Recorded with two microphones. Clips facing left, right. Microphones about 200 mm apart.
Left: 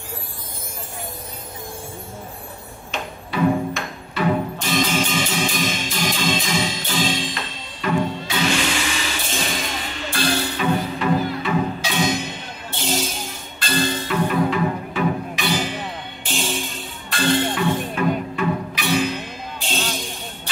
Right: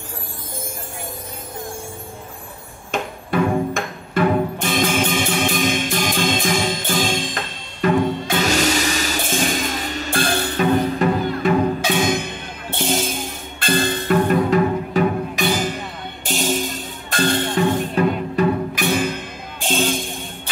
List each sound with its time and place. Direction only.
2.9 s music: 50° right (ahead or behind)